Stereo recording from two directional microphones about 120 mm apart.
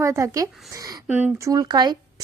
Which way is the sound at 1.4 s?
30° right (ahead or behind).